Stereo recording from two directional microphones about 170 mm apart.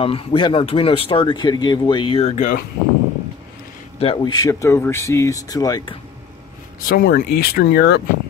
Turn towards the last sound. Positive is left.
turn(degrees=75)  # may be behind; listen again after turning